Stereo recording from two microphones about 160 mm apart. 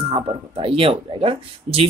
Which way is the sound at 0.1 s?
35° right (ahead or behind).